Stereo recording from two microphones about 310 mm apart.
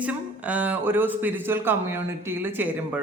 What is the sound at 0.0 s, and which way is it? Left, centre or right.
Speech, centre.